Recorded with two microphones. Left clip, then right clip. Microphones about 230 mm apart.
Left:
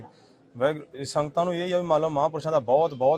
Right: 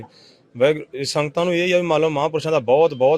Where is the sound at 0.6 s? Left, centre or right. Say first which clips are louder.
Right 8 dB; right.